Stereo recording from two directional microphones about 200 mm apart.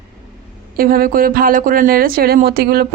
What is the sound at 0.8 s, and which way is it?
Speech, 45° right (ahead or behind).